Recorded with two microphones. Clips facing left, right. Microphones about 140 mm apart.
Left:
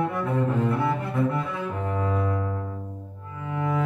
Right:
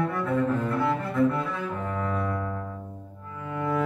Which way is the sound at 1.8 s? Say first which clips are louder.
Left 4 dB; 15° left (ahead or behind).